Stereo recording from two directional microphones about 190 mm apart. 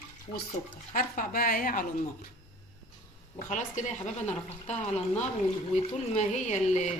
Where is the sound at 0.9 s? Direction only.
50° left (ahead or behind).